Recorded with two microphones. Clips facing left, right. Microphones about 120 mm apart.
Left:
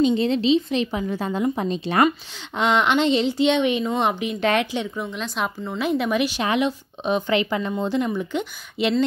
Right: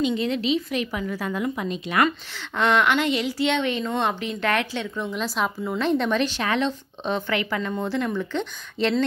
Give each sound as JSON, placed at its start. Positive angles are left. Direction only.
{"t": 0.0, "sound": "a woman's voice", "side_deg": 30}
{"t": 2.0, "sound": "a woman's voice", "side_deg": 15}
{"t": 4.9, "sound": "a woman's voice", "side_deg": 0}